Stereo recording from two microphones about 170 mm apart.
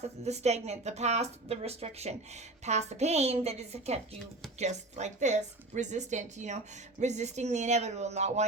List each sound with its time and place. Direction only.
0.3 s a woman's voice: 40° right (ahead or behind)